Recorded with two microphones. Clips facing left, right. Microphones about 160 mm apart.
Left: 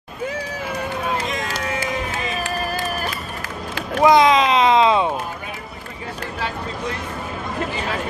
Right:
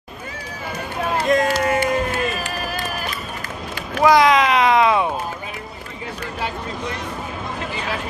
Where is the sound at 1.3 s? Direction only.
60° right (ahead or behind).